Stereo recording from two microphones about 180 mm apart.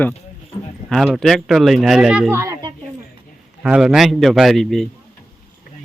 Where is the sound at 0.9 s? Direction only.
Centre (ahead or behind).